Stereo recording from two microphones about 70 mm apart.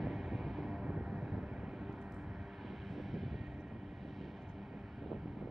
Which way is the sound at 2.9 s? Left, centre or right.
Centre.